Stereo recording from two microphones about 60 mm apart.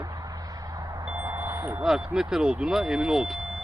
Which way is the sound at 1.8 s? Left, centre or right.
Centre.